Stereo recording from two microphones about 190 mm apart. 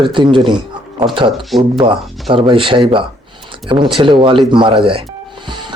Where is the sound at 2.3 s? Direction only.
25° right (ahead or behind).